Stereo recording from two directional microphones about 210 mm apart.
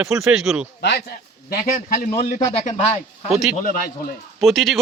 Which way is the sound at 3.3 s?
Centre (ahead or behind).